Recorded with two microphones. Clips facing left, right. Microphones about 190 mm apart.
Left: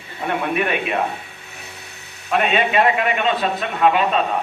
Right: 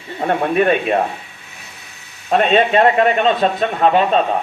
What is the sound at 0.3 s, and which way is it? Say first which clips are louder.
Speech: right 6 dB; 35° right (ahead or behind).